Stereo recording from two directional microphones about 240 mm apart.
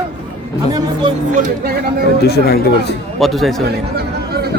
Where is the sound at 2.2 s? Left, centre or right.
Left.